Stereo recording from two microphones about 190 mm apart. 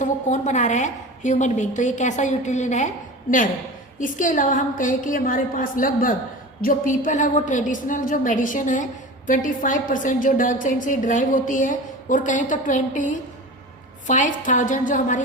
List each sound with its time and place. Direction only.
0.0 s a woman's voice: 40° left (ahead or behind)